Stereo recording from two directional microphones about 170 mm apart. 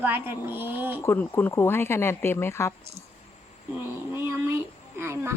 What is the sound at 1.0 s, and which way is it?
Speech, 15° left (ahead or behind).